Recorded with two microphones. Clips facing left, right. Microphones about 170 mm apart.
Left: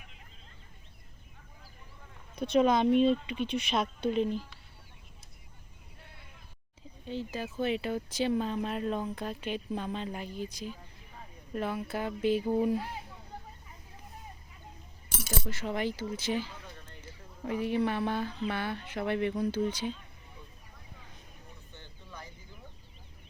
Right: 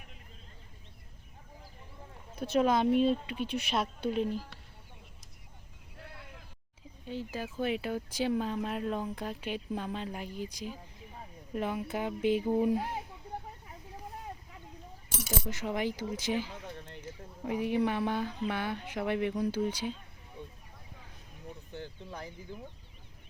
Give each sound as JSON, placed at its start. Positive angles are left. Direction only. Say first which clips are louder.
{"t": 2.3, "sound": "speech", "louder": "left 2 dB", "side_deg": -5}
{"t": 6.0, "sound": "a sound", "louder": "right 8 dB", "side_deg": -80}
{"t": 7.1, "sound": "speech", "louder": "left 1 dB", "side_deg": -10}
{"t": 15.2, "sound": "speech", "louder": "even", "side_deg": -15}